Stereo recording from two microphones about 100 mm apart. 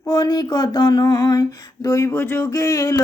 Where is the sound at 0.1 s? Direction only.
40° left (ahead or behind).